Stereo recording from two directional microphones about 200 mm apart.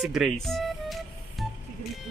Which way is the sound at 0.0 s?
Centre (ahead or behind).